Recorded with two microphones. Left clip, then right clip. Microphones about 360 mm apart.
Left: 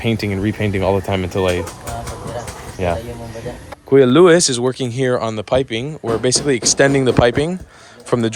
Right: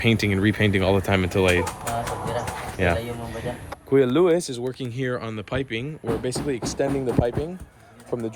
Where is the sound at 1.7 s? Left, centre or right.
Right.